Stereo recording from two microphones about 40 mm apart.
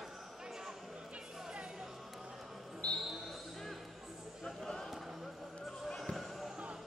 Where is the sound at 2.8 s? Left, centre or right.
Left.